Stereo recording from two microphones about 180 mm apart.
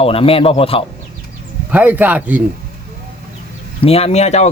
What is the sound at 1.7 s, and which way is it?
Speech, 10° right (ahead or behind).